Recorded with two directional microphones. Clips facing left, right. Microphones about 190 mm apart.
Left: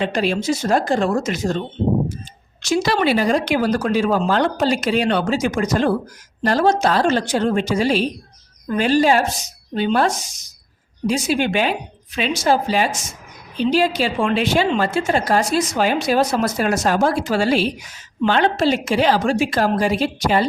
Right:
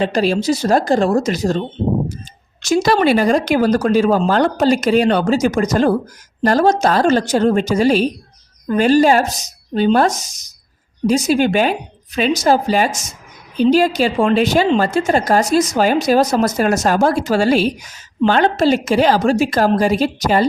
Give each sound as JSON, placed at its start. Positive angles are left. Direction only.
{"t": 0.0, "sound": "a woman's voice", "side_deg": -35}